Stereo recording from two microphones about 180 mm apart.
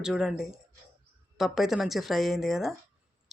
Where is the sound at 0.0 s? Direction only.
Centre (ahead or behind).